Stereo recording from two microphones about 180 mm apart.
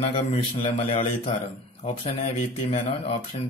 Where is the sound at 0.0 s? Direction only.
35° left (ahead or behind).